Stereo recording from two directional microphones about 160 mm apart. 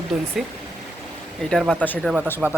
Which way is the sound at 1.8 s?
10° left (ahead or behind).